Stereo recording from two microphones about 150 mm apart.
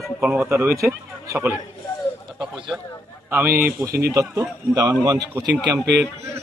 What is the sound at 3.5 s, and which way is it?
Speech, 75° right (ahead or behind).